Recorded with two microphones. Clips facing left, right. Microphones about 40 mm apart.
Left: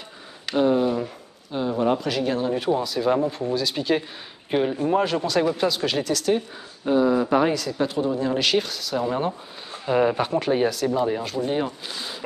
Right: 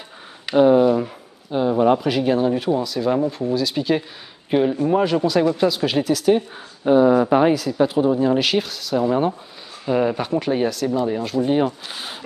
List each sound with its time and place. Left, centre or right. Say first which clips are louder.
0.5 s speech: right 6 dB; centre
6.8 s speech: right 5 dB; right
7.2 s speech: right 4 dB; centre
9.8 s speech: right 1 dB; centre
11.4 s speech: right 7 dB; centre
11.9 s speech: right 1 dB; right